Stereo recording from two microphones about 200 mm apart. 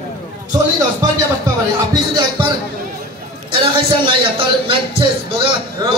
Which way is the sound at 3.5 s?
25° right (ahead or behind).